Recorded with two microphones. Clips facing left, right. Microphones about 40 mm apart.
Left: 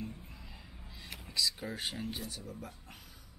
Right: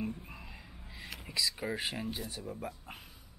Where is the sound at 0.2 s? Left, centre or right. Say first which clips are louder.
Right 4 dB; right.